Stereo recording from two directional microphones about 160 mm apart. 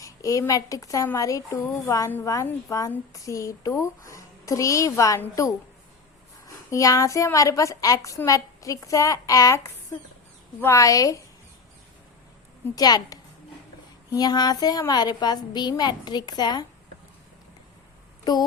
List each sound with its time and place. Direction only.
0.0 s speech: 20° left (ahead or behind)
6.7 s speech: 20° left (ahead or behind)
12.7 s speech: 25° left (ahead or behind)
18.3 s speech: 25° left (ahead or behind)